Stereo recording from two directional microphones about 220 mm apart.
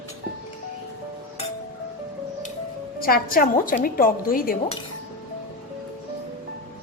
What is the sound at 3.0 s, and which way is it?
A woman's voice, 40° left (ahead or behind).